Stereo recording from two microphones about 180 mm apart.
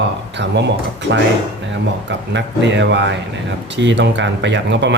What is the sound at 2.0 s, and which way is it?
Speech, 80° right.